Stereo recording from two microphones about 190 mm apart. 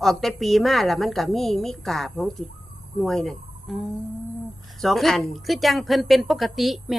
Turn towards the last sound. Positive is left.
turn(degrees=0)  # may be behind; listen again after turning